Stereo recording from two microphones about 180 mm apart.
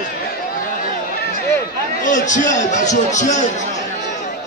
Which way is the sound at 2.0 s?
45° left (ahead or behind).